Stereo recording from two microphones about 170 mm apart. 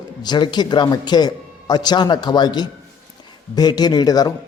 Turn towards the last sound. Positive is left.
turn(degrees=20)  # may be behind; listen again after turning